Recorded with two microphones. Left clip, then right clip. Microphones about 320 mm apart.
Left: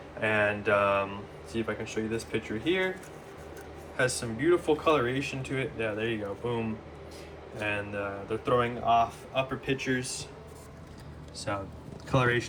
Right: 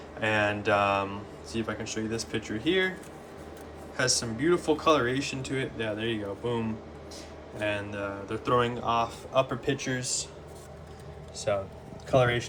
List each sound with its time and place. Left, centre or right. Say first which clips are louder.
0.2 s speech: even; centre
3.9 s speech: right 1 dB; centre